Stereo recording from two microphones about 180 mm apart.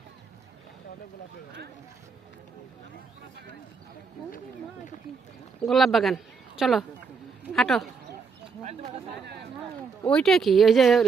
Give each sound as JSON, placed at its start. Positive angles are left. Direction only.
{"t": 5.5, "sound": "speech", "side_deg": 0}
{"t": 9.2, "sound": "speech", "side_deg": -70}
{"t": 10.1, "sound": "speech", "side_deg": 5}